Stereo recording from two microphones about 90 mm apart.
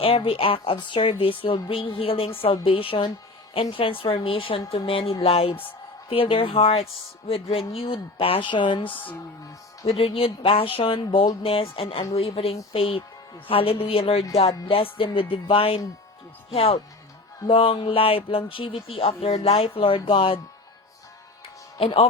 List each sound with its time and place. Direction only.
0.0 s speech: 90° left
0.8 s speech: 60° left (ahead or behind)
2.0 s a woman's voice: 90° left; by 9.0 s 70° left (ahead or behind)
10.0 s speech: 90° left; by 20.4 s 75° left (ahead or behind)
21.8 s speech: 90° left